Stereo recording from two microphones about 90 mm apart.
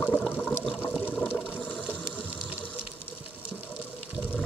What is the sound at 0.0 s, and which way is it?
Water, 10° left (ahead or behind).